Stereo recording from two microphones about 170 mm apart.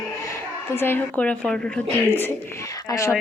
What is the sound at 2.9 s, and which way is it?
Speech, 20° left (ahead or behind).